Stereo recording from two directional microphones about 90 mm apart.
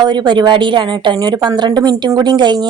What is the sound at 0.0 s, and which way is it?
A woman's voice, 55° right (ahead or behind).